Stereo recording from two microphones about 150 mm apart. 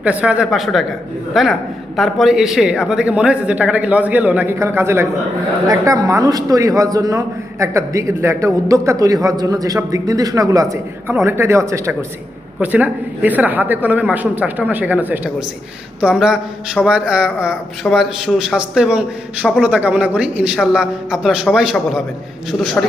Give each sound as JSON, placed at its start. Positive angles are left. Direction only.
{"t": 0.0, "sound": "a man's voice", "side_deg": -10}